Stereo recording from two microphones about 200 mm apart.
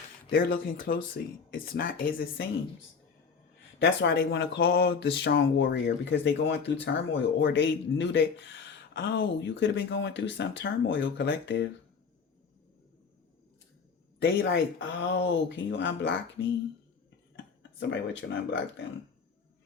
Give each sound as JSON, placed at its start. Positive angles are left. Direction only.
{"t": 0.3, "sound": "speech", "side_deg": 50}
{"t": 3.8, "sound": "speech", "side_deg": 60}
{"t": 14.2, "sound": "speech", "side_deg": 60}